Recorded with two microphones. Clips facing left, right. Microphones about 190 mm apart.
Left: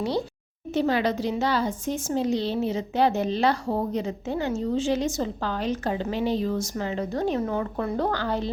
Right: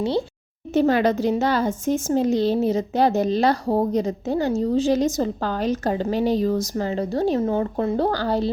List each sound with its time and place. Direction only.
0.7 s speech: 45° right (ahead or behind)